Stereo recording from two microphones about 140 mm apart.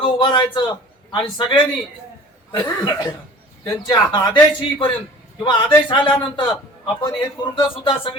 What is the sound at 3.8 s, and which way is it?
Speech, 35° left (ahead or behind).